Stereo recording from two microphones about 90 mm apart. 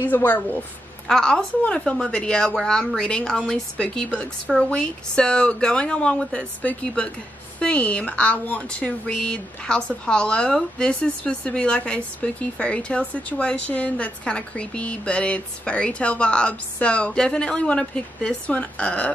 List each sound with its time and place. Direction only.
0.0 s speech: 20° left (ahead or behind)
1.0 s speech: 10° left (ahead or behind)